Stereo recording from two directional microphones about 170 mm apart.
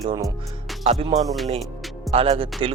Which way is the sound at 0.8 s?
40° right (ahead or behind).